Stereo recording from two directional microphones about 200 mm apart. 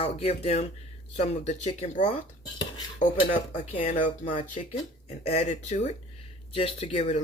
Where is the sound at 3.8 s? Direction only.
40° left (ahead or behind).